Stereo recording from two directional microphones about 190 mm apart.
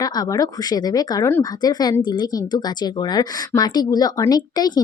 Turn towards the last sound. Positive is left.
turn(degrees=20)  # may be behind; listen again after turning